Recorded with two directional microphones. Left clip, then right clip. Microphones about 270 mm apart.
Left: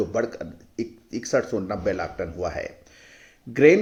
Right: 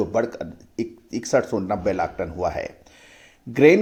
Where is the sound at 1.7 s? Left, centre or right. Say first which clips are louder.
Right 5 dB; centre.